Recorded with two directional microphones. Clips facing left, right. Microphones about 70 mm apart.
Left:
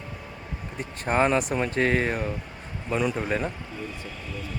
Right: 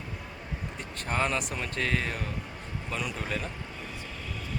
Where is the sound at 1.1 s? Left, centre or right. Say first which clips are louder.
Left 7 dB; left.